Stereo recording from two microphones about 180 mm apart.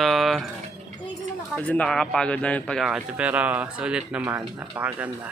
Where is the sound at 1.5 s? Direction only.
5° left (ahead or behind).